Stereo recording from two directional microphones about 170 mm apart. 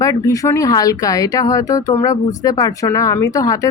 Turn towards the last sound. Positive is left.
turn(degrees=20)  # may be behind; listen again after turning